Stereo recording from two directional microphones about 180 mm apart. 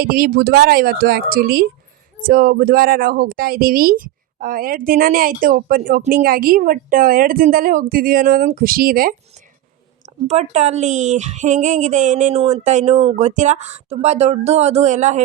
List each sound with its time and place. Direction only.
0.0 s a woman's voice: 55° right (ahead or behind)
10.2 s speech: 40° right (ahead or behind)